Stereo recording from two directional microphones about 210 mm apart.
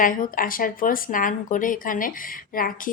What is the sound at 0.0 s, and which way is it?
A woman's voice, 40° left (ahead or behind).